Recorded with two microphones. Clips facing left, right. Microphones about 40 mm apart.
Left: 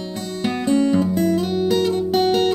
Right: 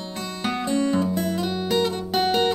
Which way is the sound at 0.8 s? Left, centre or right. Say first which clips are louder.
Left 5 dB; centre.